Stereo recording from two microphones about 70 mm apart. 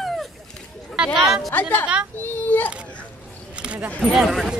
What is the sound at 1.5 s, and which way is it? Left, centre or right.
Music, left.